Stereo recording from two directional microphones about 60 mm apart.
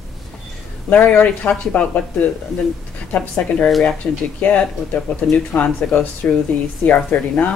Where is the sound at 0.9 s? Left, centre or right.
Left.